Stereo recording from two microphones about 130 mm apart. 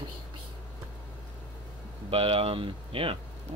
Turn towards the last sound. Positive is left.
turn(degrees=-45)  # may be behind; listen again after turning